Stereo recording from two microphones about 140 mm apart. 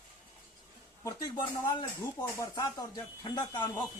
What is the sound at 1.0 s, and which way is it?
Speech, 25° left (ahead or behind).